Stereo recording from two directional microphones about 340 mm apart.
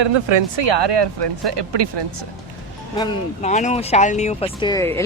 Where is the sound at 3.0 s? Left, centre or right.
Centre.